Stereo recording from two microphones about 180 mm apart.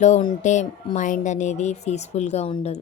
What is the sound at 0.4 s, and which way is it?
Speech, 40° left (ahead or behind).